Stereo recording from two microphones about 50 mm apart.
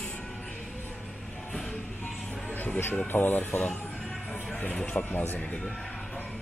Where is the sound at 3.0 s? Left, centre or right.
Left.